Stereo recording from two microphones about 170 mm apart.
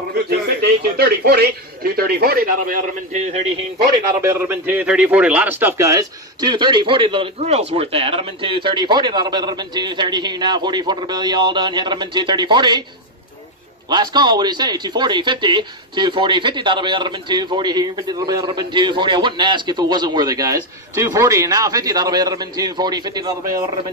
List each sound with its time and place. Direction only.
0.1 s a man's voice: 70° right (ahead or behind)
4.2 s speech: 15° right (ahead or behind)
13.8 s speech: 25° right (ahead or behind)